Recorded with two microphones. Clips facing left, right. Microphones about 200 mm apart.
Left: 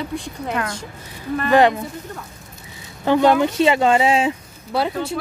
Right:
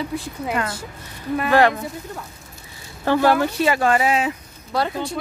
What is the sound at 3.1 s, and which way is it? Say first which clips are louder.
Speech: left 2 dB; 20° left (ahead or behind).